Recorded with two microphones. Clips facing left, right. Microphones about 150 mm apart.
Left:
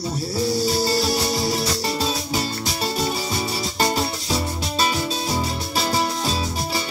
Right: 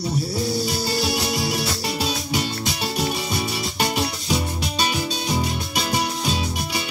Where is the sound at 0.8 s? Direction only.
Centre (ahead or behind).